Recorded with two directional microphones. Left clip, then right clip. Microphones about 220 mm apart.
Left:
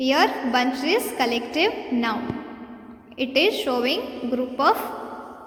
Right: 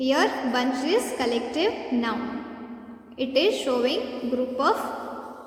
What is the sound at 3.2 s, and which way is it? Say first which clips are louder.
A woman's voice: left 2 dB; 25° left (ahead or behind).